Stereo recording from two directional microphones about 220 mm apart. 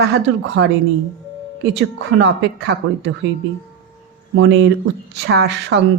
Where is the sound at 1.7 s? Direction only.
55° right (ahead or behind).